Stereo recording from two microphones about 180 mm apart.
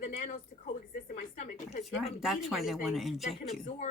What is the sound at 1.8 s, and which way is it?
Speech, centre (ahead or behind).